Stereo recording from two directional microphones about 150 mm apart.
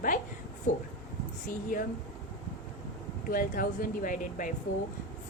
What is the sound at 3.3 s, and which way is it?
A woman's voice, 65° left (ahead or behind).